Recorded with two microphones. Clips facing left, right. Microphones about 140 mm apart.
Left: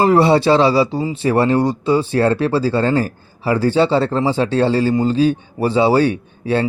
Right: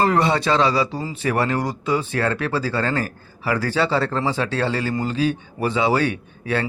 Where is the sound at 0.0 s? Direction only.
30° left (ahead or behind).